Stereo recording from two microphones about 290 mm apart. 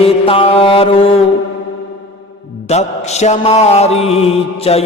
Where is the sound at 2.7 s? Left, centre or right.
Left.